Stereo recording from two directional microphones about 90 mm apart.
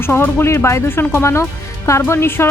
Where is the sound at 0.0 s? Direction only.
25° left (ahead or behind).